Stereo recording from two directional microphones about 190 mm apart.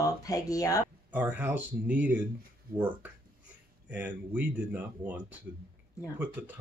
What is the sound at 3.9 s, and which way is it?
Speech, 10° right (ahead or behind).